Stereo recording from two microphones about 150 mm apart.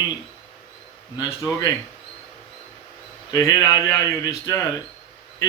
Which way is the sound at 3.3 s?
25° left (ahead or behind).